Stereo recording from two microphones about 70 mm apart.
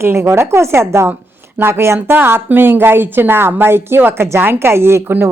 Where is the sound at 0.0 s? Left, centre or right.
Right.